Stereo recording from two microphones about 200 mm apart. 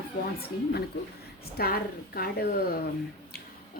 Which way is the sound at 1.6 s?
50° left (ahead or behind).